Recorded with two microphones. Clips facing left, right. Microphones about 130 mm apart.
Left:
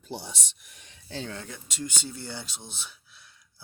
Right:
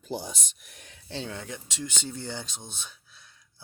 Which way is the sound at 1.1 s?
5° right (ahead or behind).